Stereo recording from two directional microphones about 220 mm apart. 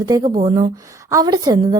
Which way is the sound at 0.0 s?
15° right (ahead or behind).